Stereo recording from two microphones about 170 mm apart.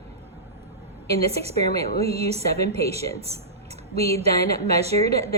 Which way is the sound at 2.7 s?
35° right (ahead or behind).